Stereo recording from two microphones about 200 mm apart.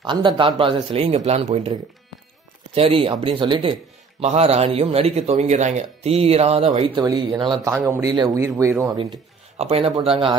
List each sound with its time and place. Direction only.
0.0 s speech: 25° right (ahead or behind)
9.6 s speech: 30° right (ahead or behind)